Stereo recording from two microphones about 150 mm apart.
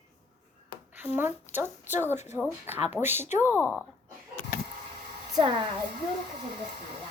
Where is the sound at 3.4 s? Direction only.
15° left (ahead or behind).